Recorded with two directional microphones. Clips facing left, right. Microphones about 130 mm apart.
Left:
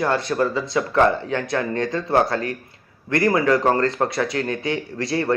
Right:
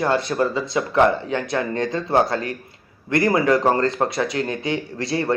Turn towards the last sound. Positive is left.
turn(degrees=-25)  # may be behind; listen again after turning